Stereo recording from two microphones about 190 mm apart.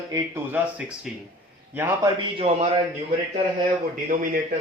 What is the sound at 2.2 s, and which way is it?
Speech, 30° right (ahead or behind).